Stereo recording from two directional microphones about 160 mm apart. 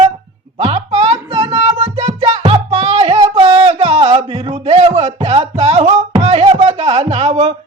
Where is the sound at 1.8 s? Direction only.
40° right (ahead or behind).